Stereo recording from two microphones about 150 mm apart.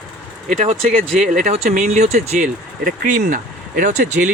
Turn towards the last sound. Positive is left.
turn(degrees=-60)  # may be behind; listen again after turning